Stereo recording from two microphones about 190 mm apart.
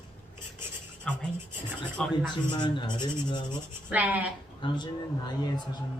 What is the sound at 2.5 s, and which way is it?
Owl, 25° left (ahead or behind).